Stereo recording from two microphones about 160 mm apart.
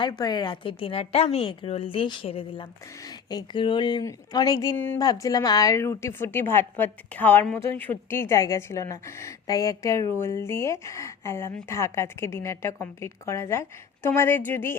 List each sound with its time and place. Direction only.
0.0 s a woman's voice: 25° left (ahead or behind)